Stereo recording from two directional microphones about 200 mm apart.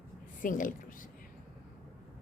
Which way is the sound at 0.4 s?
40° left (ahead or behind).